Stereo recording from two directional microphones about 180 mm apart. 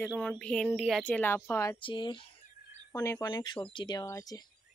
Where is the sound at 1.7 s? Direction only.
25° left (ahead or behind).